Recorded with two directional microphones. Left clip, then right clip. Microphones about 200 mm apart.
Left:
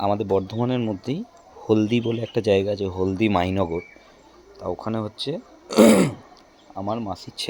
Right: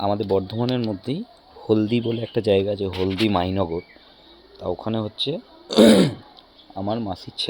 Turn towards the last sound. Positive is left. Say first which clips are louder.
# right 2 dB
turn(degrees=-10)  # may be behind; listen again after turning